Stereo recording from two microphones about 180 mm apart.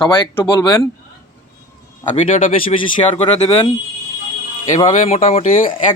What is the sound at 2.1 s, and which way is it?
Speech, 40° left (ahead or behind).